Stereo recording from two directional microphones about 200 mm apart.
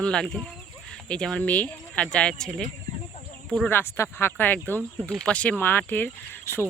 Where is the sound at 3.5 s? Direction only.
5° left (ahead or behind).